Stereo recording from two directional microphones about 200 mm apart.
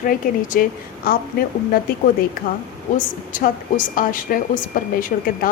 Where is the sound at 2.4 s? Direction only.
45° left (ahead or behind).